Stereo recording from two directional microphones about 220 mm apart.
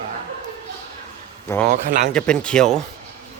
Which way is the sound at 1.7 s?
35° right (ahead or behind).